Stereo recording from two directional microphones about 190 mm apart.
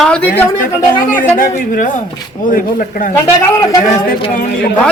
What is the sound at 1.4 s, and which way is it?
Speech, 45° left (ahead or behind).